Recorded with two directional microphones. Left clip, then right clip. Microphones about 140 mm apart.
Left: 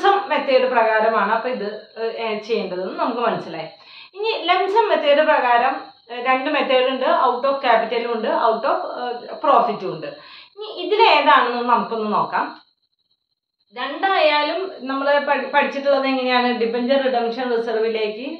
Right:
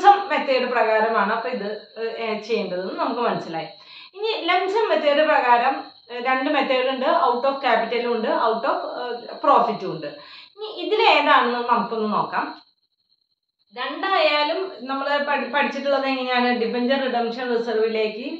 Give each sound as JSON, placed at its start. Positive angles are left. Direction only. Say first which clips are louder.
{"t": 0.3, "sound": "a woman's voice", "louder": "left 4 dB", "side_deg": 25}
{"t": 13.7, "sound": "a woman's voice", "louder": "left 3 dB", "side_deg": 30}